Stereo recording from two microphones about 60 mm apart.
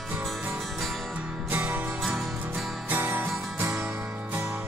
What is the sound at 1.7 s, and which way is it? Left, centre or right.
Music, right.